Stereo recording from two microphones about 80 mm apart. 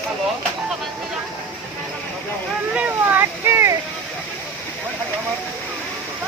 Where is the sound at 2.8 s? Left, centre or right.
Right.